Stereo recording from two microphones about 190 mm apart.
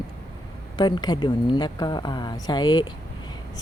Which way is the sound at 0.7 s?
20° left (ahead or behind).